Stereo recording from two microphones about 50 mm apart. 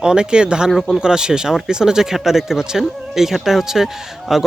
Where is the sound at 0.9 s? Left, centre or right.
Centre.